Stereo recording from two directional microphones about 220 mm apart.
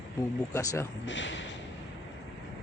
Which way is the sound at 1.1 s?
55° left (ahead or behind).